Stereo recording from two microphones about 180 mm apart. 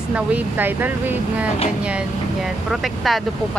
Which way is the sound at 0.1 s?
10° right (ahead or behind).